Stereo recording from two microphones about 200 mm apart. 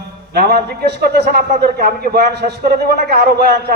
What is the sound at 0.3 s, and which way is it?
A man's voice, 50° right (ahead or behind).